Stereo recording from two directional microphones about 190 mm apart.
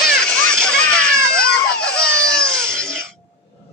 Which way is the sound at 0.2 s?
5° left (ahead or behind).